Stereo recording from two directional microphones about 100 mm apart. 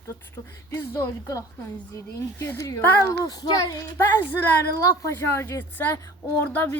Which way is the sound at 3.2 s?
40° left (ahead or behind).